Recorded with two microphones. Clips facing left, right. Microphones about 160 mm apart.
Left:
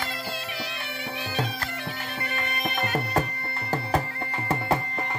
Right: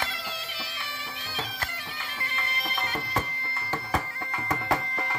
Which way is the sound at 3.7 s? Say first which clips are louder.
Left 4 dB; 35° left (ahead or behind).